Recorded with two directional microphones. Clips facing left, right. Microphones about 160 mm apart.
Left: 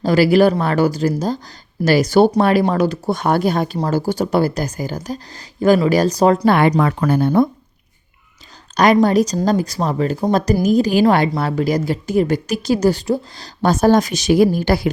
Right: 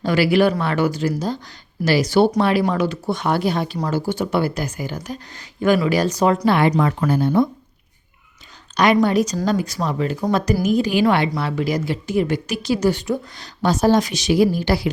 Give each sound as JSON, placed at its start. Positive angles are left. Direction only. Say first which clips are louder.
{"t": 0.0, "sound": "a woman's voice", "louder": "left 4 dB", "side_deg": 40}
{"t": 6.7, "sound": "speech", "louder": "left 2 dB", "side_deg": 75}
{"t": 7.0, "sound": "speech", "louder": "left 3 dB", "side_deg": 60}
{"t": 8.7, "sound": "a woman's voice", "louder": "left 3 dB", "side_deg": 40}
{"t": 13.6, "sound": "a woman's voice", "louder": "left 3 dB", "side_deg": 50}